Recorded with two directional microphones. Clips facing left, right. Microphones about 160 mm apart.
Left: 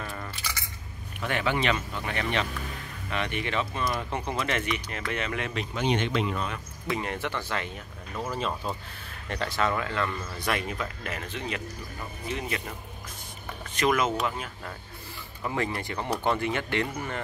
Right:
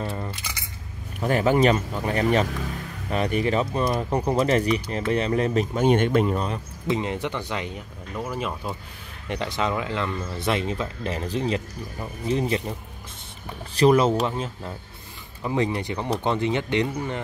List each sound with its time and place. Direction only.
0.0 s a sound: 25° right (ahead or behind)
1.2 s speech: 40° right (ahead or behind)
6.9 s speech: 20° right (ahead or behind)